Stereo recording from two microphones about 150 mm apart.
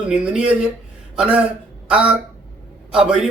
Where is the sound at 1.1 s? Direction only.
5° right (ahead or behind).